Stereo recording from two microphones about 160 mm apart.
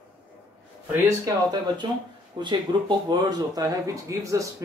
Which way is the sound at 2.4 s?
30° right (ahead or behind).